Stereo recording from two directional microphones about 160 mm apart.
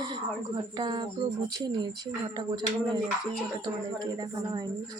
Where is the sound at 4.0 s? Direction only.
25° right (ahead or behind).